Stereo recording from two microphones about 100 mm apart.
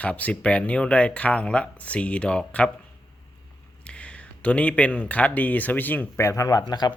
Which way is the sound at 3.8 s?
10° left (ahead or behind).